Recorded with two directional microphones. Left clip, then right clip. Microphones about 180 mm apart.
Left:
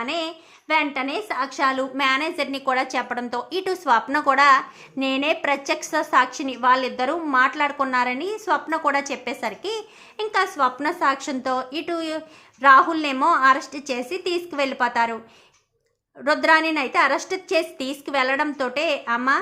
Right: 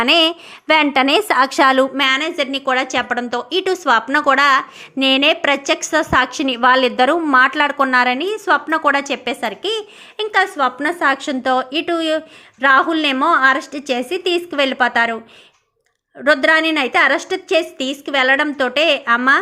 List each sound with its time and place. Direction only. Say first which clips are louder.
0.0 s a woman's voice: right 13 dB; 40° right (ahead or behind)
2.0 s a woman's voice: right 5 dB; 15° right (ahead or behind)
16.2 s a woman's voice: right 5 dB; 15° right (ahead or behind)